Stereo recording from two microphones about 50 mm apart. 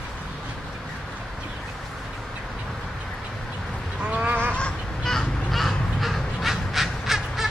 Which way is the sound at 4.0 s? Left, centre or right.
Right.